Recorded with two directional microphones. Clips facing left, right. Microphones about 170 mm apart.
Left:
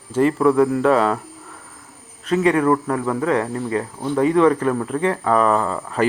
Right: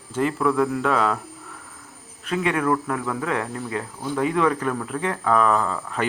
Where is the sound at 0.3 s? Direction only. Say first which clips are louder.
Left 4 dB; 30° left (ahead or behind).